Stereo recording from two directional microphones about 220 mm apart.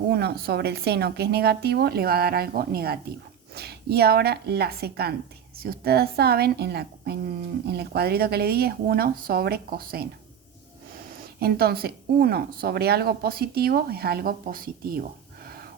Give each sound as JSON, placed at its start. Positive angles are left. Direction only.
{"t": 0.1, "sound": "a woman's voice", "side_deg": -45}
{"t": 11.3, "sound": "a woman's voice", "side_deg": -45}